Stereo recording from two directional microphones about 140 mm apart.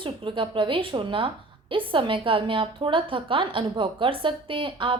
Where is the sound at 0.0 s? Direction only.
35° right (ahead or behind).